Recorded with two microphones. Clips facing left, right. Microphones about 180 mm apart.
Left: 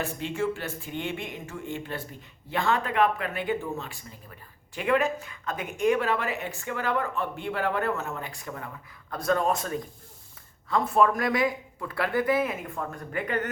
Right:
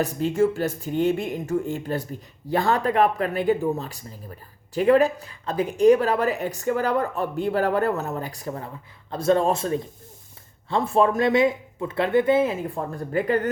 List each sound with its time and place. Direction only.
0.0 s speech: 40° right (ahead or behind)